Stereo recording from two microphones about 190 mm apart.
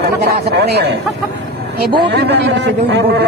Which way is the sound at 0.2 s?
60° right (ahead or behind).